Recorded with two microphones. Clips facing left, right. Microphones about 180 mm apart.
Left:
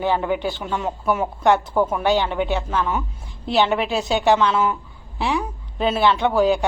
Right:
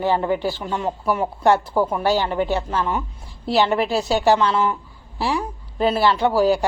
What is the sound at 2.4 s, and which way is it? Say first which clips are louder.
Speech: right 1 dB; 35° right (ahead or behind).